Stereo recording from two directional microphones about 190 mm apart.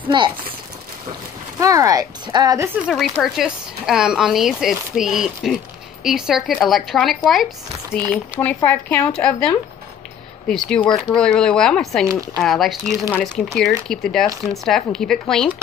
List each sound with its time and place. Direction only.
0.1 s speech: 25° right (ahead or behind)
1.6 s speech: 15° right (ahead or behind)
3.2 s speech: centre (ahead or behind)
10.5 s speech: 5° left (ahead or behind)